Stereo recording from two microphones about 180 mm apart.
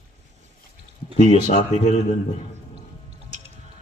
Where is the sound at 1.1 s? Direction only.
40° left (ahead or behind).